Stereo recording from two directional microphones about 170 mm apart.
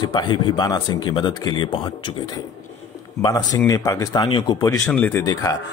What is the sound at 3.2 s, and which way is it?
Speech, 20° left (ahead or behind).